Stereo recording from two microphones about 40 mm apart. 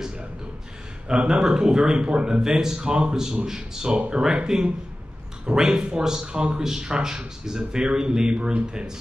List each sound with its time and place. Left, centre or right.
1.0 s speech: right
3.9 s speech: right
4.2 s speech: centre